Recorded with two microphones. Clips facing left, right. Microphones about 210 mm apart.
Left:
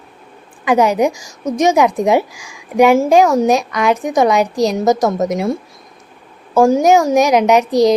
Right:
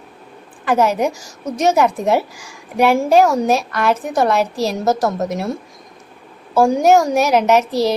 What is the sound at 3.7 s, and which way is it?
A woman's voice, 15° left (ahead or behind).